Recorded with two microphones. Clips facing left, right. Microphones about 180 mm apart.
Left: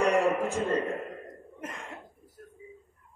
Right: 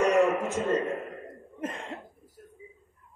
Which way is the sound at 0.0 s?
30° left (ahead or behind).